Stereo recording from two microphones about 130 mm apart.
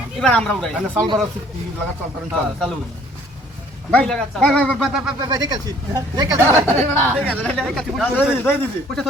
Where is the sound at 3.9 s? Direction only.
5° left (ahead or behind).